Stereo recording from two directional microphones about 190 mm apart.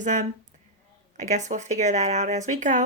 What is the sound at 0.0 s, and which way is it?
Speech, 40° right (ahead or behind).